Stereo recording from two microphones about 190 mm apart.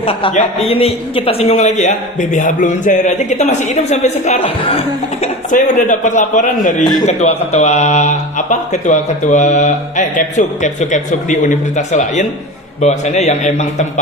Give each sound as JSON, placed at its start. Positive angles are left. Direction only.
{"t": 0.0, "sound": "a man's voice", "side_deg": 30}